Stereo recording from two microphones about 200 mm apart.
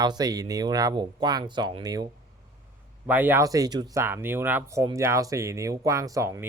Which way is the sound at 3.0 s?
10° right (ahead or behind).